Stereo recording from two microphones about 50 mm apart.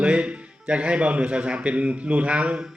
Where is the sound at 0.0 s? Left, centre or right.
Right.